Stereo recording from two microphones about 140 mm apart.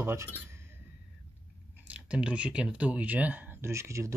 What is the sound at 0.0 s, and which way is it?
Speech, 20° right (ahead or behind).